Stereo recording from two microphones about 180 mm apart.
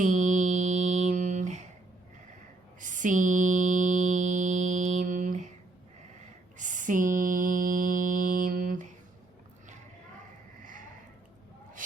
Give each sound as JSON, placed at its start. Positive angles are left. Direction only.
{"t": 0.0, "sound": "mantra", "side_deg": -45}
{"t": 2.8, "sound": "mantra", "side_deg": -45}
{"t": 6.6, "sound": "mantra", "side_deg": -45}
{"t": 10.6, "sound": "a sound", "side_deg": -45}